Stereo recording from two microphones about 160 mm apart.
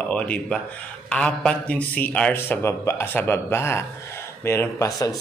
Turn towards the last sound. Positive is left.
turn(degrees=20)  # may be behind; listen again after turning